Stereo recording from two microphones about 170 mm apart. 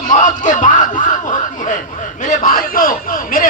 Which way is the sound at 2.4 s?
55° left (ahead or behind).